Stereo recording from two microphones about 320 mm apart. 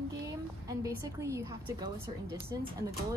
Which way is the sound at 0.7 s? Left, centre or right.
Centre.